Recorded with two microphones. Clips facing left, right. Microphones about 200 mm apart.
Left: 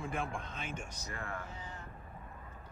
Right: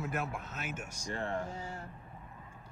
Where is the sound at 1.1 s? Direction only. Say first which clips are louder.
Right 8 dB; 30° right (ahead or behind).